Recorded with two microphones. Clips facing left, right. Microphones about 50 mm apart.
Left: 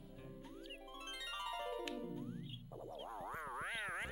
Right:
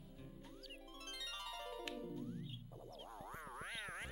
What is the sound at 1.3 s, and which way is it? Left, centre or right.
Music, centre.